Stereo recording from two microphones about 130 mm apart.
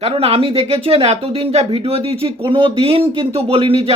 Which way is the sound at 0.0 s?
50° right (ahead or behind).